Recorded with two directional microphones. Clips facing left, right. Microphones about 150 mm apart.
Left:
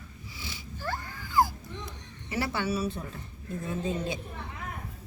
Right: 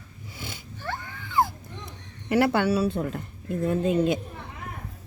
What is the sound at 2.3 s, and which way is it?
Speech, 60° right (ahead or behind).